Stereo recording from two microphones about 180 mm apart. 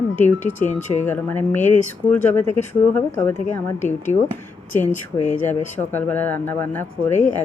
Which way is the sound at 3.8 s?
40° left (ahead or behind).